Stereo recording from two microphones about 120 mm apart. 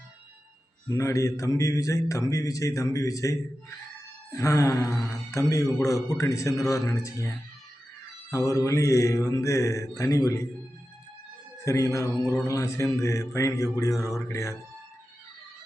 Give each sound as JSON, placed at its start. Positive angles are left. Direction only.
{"t": 0.9, "sound": "speech", "side_deg": 25}
{"t": 11.6, "sound": "speech", "side_deg": 25}